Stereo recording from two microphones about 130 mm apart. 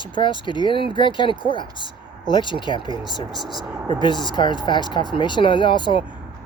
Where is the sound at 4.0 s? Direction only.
35° left (ahead or behind).